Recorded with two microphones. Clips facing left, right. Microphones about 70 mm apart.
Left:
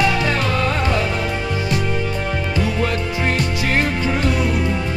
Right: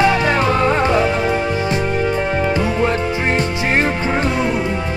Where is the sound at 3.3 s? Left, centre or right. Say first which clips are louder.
Right 2 dB; right.